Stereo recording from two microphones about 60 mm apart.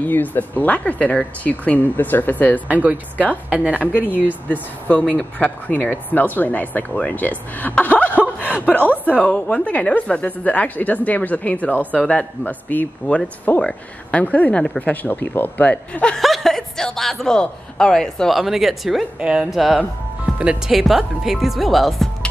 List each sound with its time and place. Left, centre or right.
0.0 s speech: left
2.7 s a woman's voice: right
3.8 s speech: left
7.8 s a sound: left
8.4 s speech: left
15.7 s speech: centre
16.2 s a woman's voice: centre
18.3 s speech: centre
19.1 s speech: centre
19.5 s speech: centre
20.3 s speech: centre
20.7 s speech: centre